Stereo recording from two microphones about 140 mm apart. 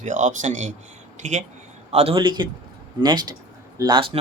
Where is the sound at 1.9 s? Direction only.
45° right (ahead or behind).